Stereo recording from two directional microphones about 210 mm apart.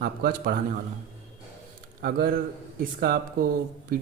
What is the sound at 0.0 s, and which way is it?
Speech, 45° right (ahead or behind).